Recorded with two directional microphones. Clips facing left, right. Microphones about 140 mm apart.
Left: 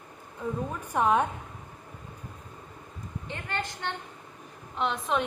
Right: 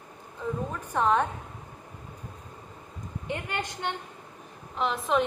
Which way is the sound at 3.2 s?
15° right (ahead or behind).